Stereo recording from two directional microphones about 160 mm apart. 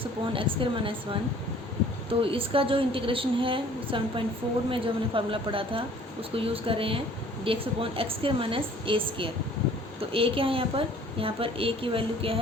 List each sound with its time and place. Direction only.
0.0 s a woman's voice: 35° right (ahead or behind)
2.0 s a woman's voice: 35° right (ahead or behind)